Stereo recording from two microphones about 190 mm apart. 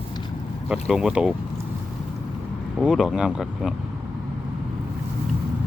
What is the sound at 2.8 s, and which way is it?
Speech, 5° right (ahead or behind).